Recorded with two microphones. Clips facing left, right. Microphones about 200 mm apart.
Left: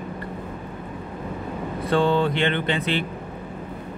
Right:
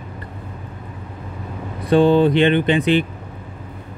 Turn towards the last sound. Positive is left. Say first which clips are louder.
# right 8 dB
turn(degrees=-15)  # may be behind; listen again after turning